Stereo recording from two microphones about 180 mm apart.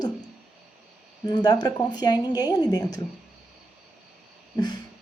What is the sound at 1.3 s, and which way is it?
Speech, 20° left (ahead or behind).